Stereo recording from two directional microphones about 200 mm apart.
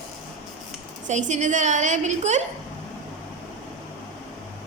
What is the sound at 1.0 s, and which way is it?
A woman's voice, 35° right (ahead or behind).